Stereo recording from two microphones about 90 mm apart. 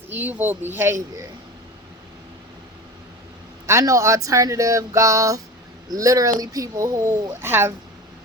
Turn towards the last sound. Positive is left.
turn(degrees=-25)  # may be behind; listen again after turning